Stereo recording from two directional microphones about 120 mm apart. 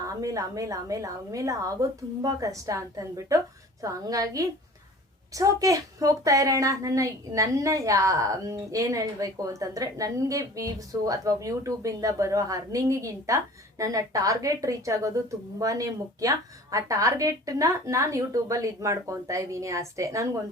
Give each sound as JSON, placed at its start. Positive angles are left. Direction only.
{"t": 0.0, "sound": "a woman's voice", "side_deg": -30}